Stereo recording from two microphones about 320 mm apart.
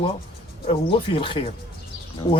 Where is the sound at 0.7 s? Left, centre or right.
Centre.